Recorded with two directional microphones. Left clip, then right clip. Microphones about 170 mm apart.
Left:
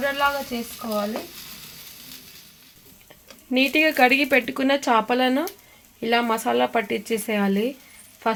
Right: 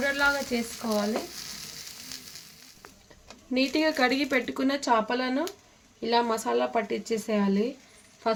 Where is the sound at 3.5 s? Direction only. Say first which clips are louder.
Left 6 dB; 35° left (ahead or behind); by 7.6 s 60° left (ahead or behind).